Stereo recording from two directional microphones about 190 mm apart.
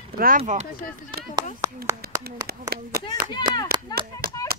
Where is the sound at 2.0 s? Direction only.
55° right (ahead or behind).